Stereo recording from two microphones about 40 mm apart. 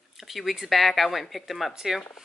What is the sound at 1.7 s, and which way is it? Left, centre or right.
Speech, centre.